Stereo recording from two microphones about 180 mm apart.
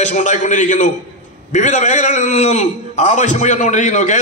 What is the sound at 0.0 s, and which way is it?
A man's voice, 40° left (ahead or behind).